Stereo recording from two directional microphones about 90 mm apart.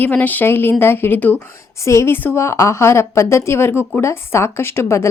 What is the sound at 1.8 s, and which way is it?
A woman's voice, 35° left (ahead or behind).